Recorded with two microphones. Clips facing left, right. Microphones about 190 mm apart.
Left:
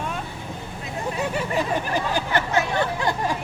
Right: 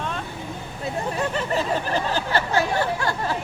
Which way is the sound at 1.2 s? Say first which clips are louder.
Left 1 dB; 10° left (ahead or behind).